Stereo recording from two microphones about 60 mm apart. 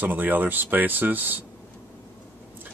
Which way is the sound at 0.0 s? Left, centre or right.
Right.